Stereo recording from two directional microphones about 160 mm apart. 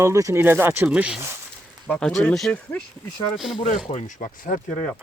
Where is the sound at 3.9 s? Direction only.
50° left (ahead or behind).